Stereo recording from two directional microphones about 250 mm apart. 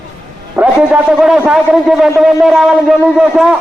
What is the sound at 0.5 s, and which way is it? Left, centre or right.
A man's voice, centre.